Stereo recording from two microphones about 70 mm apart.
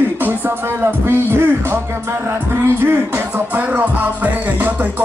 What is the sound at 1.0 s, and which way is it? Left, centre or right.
Music, right.